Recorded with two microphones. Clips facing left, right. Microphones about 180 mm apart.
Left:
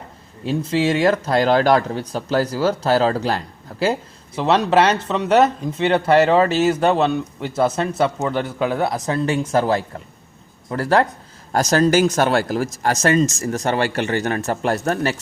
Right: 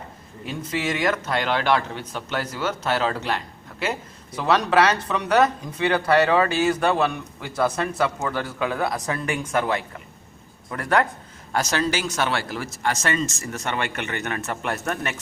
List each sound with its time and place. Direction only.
0.4 s speech: 30° left (ahead or behind)
11.5 s speech: 40° left (ahead or behind)